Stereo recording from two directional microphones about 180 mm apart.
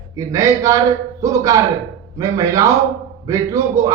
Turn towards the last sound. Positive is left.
turn(degrees=-20)  # may be behind; listen again after turning